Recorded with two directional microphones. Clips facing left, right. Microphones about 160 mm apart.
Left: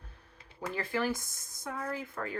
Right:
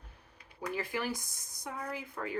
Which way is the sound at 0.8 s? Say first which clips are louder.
Left 5 dB; 15° right (ahead or behind).